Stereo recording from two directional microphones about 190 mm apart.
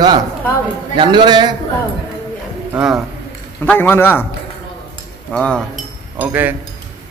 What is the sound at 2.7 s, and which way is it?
Speech, 5° right (ahead or behind).